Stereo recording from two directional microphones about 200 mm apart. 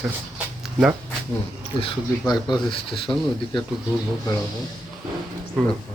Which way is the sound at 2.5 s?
25° left (ahead or behind).